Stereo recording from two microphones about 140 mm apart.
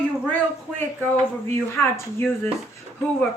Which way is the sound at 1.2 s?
15° left (ahead or behind).